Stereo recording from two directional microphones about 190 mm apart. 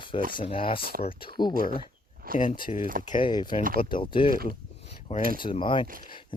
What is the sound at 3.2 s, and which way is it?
Speech, 25° left (ahead or behind).